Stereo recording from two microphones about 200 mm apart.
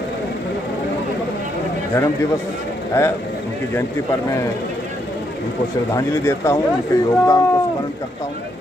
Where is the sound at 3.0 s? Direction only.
15° left (ahead or behind).